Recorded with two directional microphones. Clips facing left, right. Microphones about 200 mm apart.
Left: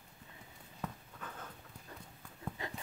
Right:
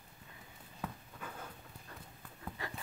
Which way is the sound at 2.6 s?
20° left (ahead or behind).